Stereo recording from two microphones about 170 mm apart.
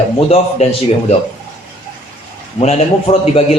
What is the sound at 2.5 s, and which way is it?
Speech, 35° left (ahead or behind).